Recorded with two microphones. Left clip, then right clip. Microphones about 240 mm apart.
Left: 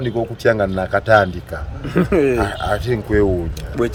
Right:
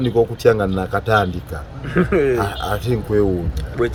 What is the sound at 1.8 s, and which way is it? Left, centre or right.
Speech, left.